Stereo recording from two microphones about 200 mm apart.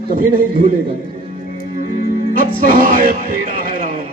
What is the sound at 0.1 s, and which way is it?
Music, 45° right (ahead or behind).